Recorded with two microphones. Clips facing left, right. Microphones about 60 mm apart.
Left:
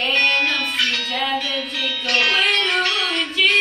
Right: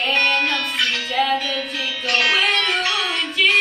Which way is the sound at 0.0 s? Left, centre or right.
Centre.